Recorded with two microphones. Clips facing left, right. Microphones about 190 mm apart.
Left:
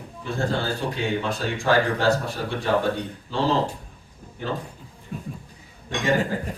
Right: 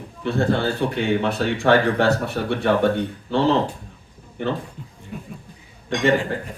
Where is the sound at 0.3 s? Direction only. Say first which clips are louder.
Right 5 dB; 60° right (ahead or behind).